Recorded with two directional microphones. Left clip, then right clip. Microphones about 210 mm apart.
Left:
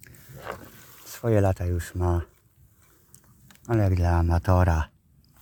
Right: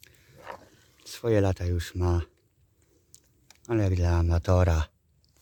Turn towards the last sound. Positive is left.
turn(degrees=-20)  # may be behind; listen again after turning